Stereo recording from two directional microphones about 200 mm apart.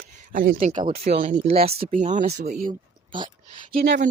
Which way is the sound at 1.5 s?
50° right (ahead or behind).